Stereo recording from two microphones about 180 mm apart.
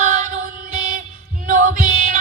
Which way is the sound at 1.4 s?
50° right (ahead or behind).